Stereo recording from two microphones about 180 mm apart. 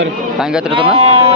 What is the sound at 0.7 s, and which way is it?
Speech, 30° right (ahead or behind).